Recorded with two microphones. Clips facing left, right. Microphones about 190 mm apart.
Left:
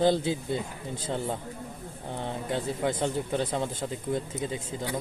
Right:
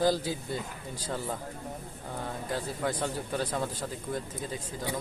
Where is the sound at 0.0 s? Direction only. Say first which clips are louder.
Left 3 dB; 25° left (ahead or behind).